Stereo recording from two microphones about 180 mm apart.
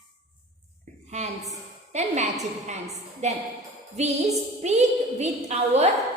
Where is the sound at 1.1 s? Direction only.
40° right (ahead or behind).